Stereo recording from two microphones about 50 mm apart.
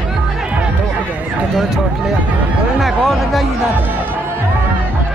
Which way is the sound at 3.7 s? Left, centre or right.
Right.